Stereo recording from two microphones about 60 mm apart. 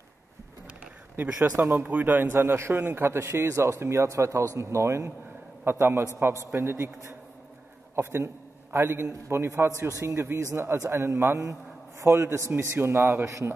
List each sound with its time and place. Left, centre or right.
1.4 s speech: right
1.8 s a man's voice: right
5.7 s a man's voice: right
13.0 s speech: right